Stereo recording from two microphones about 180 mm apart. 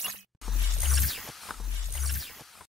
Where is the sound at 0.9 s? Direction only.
Centre (ahead or behind).